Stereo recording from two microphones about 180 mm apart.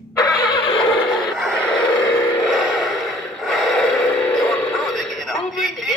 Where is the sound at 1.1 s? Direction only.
Centre (ahead or behind).